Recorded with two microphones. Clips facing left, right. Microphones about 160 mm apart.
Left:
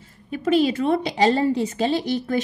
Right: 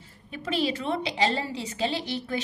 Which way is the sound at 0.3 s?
45° left (ahead or behind).